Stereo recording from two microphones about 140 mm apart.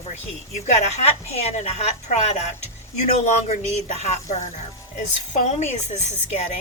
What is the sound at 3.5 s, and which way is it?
A woman's voice, 50° left (ahead or behind).